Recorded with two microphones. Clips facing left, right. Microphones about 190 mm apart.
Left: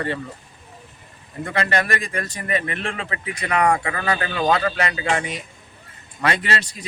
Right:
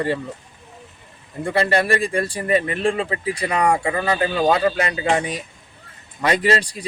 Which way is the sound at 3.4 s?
15° right (ahead or behind).